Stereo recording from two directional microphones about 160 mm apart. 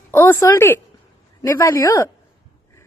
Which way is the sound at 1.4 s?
15° left (ahead or behind).